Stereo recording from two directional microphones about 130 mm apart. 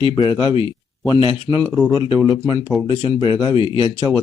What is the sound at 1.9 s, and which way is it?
Speech, 35° left (ahead or behind).